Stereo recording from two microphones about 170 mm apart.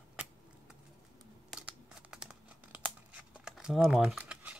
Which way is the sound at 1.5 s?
5° right (ahead or behind).